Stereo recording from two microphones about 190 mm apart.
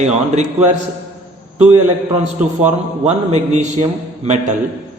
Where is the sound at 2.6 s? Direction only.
35° right (ahead or behind).